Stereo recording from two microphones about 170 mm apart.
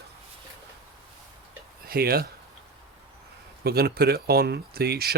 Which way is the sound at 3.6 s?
65° right (ahead or behind).